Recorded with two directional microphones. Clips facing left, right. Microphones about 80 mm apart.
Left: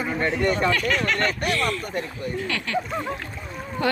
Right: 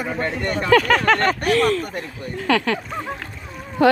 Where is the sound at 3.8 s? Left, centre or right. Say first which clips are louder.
Right 9 dB; right.